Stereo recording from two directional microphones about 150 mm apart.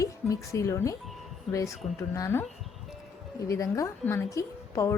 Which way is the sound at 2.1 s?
15° left (ahead or behind).